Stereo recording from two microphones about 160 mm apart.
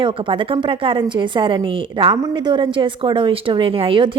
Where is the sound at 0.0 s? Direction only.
35° right (ahead or behind).